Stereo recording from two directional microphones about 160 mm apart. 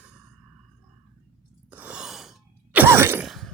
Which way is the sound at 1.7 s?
10° right (ahead or behind).